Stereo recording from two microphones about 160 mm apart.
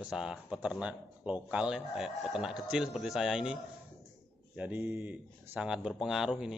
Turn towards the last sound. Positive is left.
turn(degrees=-5)  # may be behind; listen again after turning